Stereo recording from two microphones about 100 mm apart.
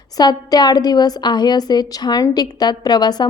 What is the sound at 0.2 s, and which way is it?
Speech, 45° left (ahead or behind).